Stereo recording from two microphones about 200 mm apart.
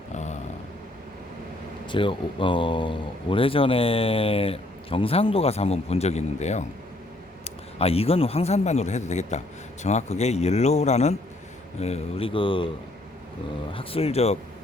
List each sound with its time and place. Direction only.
0.1 s a sound: 35° left (ahead or behind)
1.9 s a man's voice: 25° left (ahead or behind)
13.7 s a man's voice: 30° left (ahead or behind)